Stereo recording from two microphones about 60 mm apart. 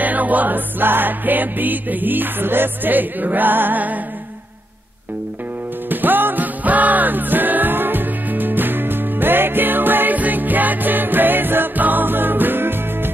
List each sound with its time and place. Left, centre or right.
0.0 s music: right
5.9 s music: right